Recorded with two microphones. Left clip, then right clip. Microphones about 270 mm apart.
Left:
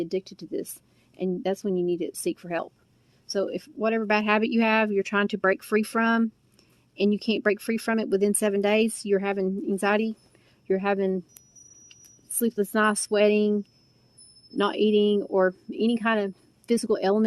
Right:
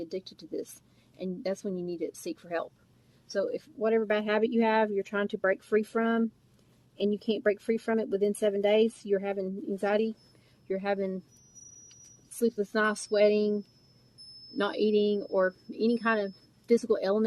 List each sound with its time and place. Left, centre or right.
0.0 s speech: left